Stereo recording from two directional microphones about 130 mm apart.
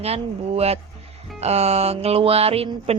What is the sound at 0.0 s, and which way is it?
Speech, 50° right (ahead or behind).